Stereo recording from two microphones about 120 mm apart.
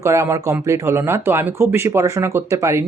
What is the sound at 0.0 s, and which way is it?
Speech, 25° right (ahead or behind).